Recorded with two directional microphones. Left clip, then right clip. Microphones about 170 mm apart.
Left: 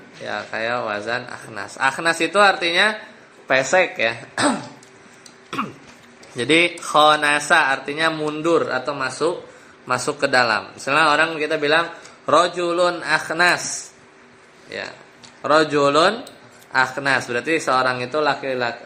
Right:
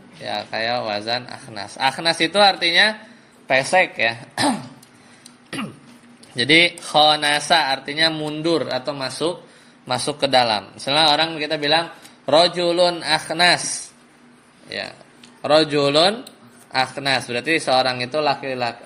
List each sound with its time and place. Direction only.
0.3 s speech: 35° right (ahead or behind)
1.3 s a man's voice: 30° right (ahead or behind)
3.4 s a man's voice: 20° right (ahead or behind)
6.3 s a man's voice: 30° right (ahead or behind)
14.7 s a man's voice: 35° right (ahead or behind)